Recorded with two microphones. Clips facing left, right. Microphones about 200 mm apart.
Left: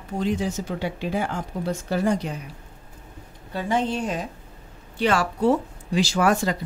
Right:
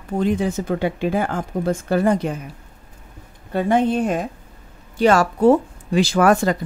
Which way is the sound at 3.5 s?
55° right (ahead or behind).